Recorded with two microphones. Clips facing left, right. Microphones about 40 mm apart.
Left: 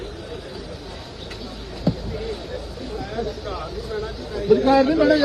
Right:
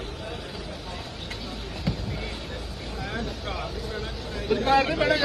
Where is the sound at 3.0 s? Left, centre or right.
Right.